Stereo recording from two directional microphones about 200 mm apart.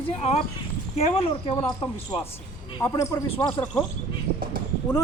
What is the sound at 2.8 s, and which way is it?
Speech, 15° left (ahead or behind).